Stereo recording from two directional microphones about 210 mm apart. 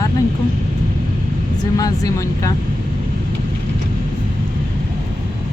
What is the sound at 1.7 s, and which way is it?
Speech, 15° left (ahead or behind).